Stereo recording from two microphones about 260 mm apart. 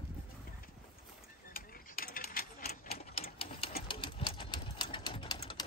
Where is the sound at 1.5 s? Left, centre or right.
Left.